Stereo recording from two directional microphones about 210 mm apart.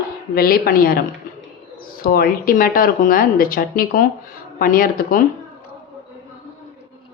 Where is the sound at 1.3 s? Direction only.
40° left (ahead or behind).